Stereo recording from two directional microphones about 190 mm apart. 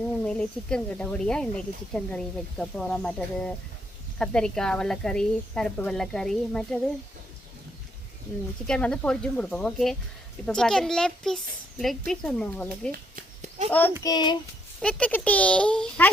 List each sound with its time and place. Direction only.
0.0 s speech: 5° left (ahead or behind)
8.6 s speech: 5° left (ahead or behind)
13.1 s a sound: 40° right (ahead or behind)
13.7 s speech: 10° left (ahead or behind)
14.0 s child singing: 20° left (ahead or behind)
14.8 s speech: 5° left (ahead or behind)